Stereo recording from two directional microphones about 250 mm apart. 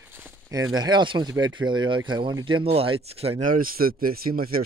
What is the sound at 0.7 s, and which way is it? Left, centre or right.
Speech, centre.